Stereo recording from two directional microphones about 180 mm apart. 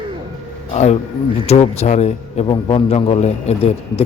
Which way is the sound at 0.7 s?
40° left (ahead or behind).